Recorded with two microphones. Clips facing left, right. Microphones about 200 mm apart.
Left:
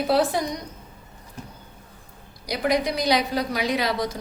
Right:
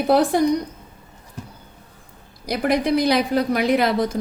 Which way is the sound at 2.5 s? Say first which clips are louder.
Right 4 dB; 55° right (ahead or behind).